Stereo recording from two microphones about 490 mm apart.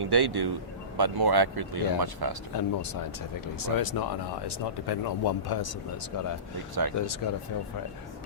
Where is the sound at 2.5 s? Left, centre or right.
Left.